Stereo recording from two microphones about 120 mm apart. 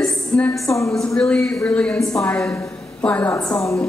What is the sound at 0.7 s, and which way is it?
Speech, 25° left (ahead or behind).